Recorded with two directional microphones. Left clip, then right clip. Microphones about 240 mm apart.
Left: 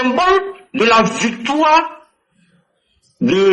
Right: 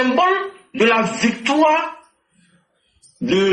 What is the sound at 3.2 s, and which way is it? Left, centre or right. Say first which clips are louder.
Speech: left 4 dB; left.